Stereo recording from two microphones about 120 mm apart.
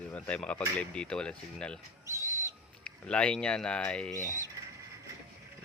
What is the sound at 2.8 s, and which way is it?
Speech, 10° left (ahead or behind).